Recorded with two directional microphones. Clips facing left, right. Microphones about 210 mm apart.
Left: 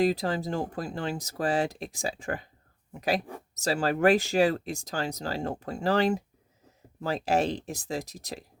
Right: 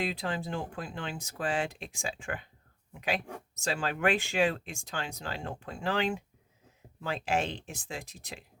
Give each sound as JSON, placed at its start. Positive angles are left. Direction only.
{"t": 0.0, "sound": "speech", "side_deg": 40}